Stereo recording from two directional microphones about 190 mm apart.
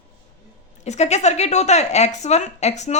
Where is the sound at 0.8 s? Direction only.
35° left (ahead or behind).